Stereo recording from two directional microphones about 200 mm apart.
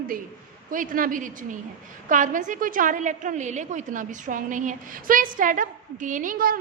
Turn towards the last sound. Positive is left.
turn(degrees=-45)  # may be behind; listen again after turning